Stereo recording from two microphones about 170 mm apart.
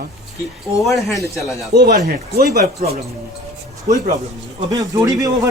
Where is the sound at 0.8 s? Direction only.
Centre (ahead or behind).